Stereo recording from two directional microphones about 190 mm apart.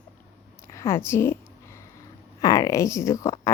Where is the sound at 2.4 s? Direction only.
15° left (ahead or behind).